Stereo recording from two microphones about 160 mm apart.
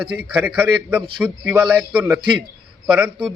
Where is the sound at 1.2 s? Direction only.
10° right (ahead or behind).